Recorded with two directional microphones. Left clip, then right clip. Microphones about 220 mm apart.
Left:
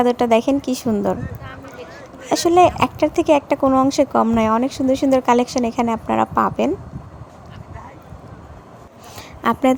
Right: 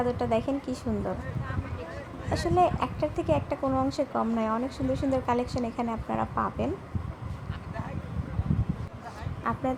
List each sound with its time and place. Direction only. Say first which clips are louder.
0.0 s speech: left 12 dB; 45° left (ahead or behind)
2.2 s speech: left 11 dB; 45° left (ahead or behind)
9.4 s speech: left 13 dB; 50° left (ahead or behind)